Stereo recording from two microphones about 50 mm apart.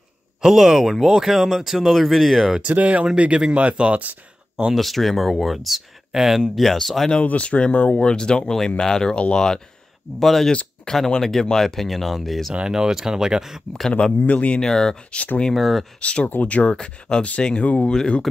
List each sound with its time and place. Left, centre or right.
0.4 s speech: centre
2.7 s speech: right
4.7 s speech: centre
7.2 s speech: left
10.2 s speech: centre
12.5 s speech: centre
14.1 s speech: left
14.6 s speech: centre
16.0 s speech: left
16.7 s speech: centre